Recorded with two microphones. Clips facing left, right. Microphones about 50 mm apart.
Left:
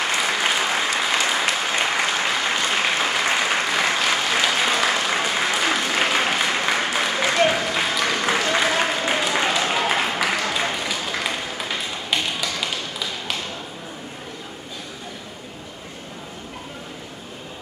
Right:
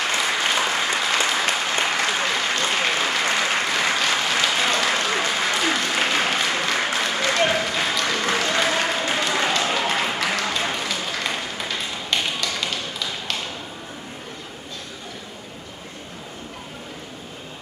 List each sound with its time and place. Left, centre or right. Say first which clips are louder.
0.1 s applause: even; centre
2.5 s applause: left 1 dB; centre
12.1 s tap: even; centre